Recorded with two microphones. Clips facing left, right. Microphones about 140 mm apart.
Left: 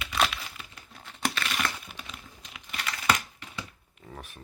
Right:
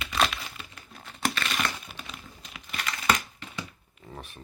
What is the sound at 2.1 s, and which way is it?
Typing, 15° left (ahead or behind).